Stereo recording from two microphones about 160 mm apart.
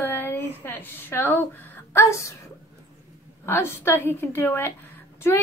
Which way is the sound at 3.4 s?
15° left (ahead or behind).